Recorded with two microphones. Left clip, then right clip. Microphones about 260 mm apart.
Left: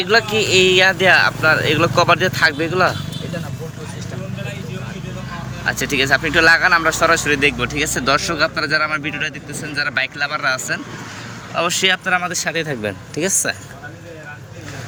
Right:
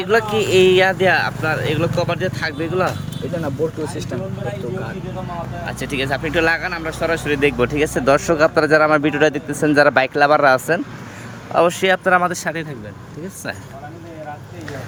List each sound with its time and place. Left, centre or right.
0.0 s speech: centre
5.6 s speech: centre